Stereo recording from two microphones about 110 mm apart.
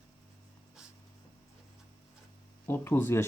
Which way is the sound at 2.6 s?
20° left (ahead or behind).